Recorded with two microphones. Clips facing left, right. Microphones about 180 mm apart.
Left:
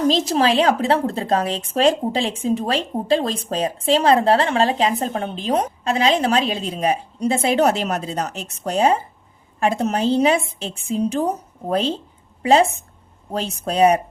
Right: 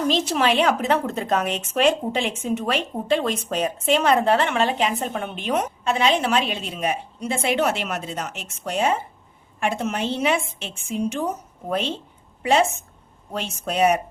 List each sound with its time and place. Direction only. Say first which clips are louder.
0.1 s a woman's voice: left 3 dB; 35° left (ahead or behind)
13.7 s a woman's voice: left 4 dB; 35° left (ahead or behind)